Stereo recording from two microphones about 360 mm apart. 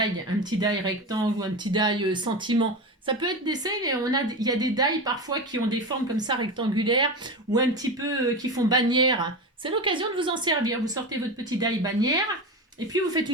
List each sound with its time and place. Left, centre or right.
0.0 s speech: centre